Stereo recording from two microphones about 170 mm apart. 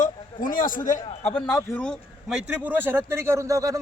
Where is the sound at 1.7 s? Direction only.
5° left (ahead or behind).